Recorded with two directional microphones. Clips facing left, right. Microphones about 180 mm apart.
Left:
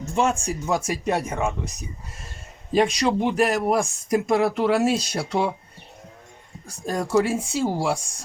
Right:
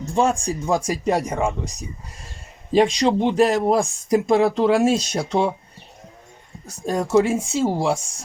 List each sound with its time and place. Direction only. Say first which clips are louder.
0.0 s a sound: right 3 dB; 35° right (ahead or behind)
0.4 s speech: right 3 dB; 30° right (ahead or behind)
2.7 s speech: right 3 dB; 25° right (ahead or behind)
6.8 s speech: right 3 dB; 25° right (ahead or behind)